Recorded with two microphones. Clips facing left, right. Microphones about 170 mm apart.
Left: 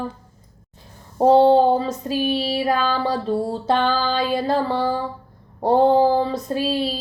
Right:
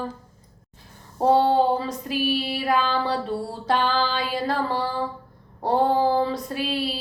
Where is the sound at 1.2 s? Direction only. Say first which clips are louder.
Left 5 dB; 25° left (ahead or behind).